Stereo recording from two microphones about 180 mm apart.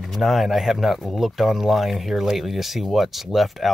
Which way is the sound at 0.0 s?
Centre (ahead or behind).